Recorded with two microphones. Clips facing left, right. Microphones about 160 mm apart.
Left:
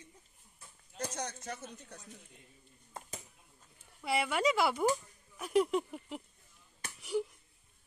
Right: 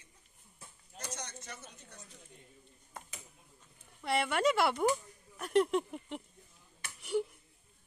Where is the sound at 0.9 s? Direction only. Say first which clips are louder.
Left 6 dB; 60° left (ahead or behind).